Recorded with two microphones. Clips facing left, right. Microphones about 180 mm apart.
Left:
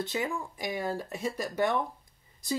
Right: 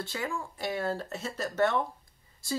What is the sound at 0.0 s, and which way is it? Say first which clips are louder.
Speech: left 3 dB; 20° left (ahead or behind).